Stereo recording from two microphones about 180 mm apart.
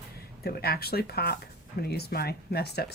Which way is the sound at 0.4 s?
60° left (ahead or behind).